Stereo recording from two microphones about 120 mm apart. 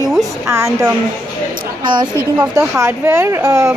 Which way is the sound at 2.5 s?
25° right (ahead or behind).